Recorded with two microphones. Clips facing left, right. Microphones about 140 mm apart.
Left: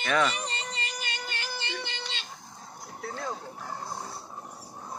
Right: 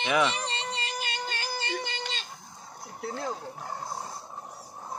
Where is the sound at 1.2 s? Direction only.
40° right (ahead or behind).